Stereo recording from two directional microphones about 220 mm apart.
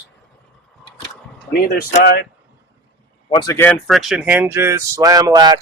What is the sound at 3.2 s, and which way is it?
Speech, 20° left (ahead or behind).